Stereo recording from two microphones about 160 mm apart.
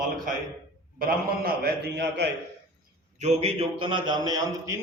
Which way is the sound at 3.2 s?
45° right (ahead or behind).